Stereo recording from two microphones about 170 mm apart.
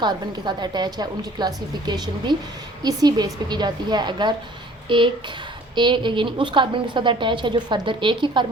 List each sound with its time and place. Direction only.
0.0 s a woman's voice: 25° right (ahead or behind)